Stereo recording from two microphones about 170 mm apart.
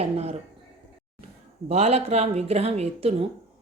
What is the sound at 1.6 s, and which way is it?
Speech, 40° right (ahead or behind).